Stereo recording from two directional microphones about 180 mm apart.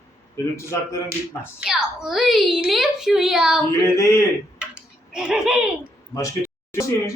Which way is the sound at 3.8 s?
15° left (ahead or behind).